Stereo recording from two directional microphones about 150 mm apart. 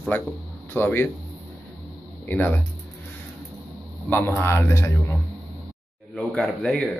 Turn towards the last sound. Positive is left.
turn(degrees=5)  # may be behind; listen again after turning